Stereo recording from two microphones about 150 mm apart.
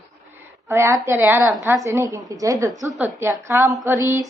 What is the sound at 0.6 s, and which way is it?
A woman's voice, 15° right (ahead or behind).